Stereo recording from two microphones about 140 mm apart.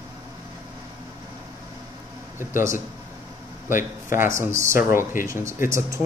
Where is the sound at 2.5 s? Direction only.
20° right (ahead or behind).